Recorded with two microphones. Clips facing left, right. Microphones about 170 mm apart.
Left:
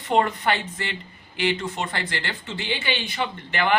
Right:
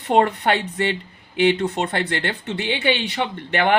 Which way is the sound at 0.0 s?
65° right (ahead or behind).